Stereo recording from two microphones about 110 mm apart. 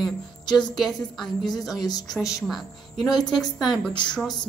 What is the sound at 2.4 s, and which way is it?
A woman's voice, centre (ahead or behind).